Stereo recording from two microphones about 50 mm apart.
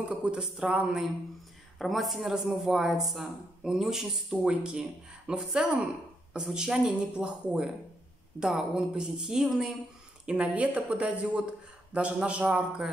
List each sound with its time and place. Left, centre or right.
0.0 s speech: right
1.8 s a woman's voice: centre
10.2 s speech: right